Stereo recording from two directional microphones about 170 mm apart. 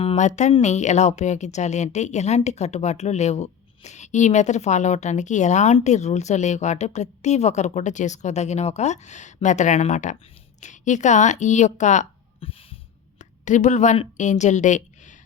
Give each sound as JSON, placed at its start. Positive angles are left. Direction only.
{"t": 0.0, "sound": "speech", "side_deg": 40}
{"t": 12.4, "sound": "a sound", "side_deg": 35}
{"t": 13.1, "sound": "a woman's voice", "side_deg": 45}